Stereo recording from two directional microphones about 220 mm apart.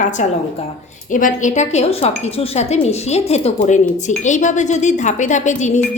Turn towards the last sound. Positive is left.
turn(degrees=35)  # may be behind; listen again after turning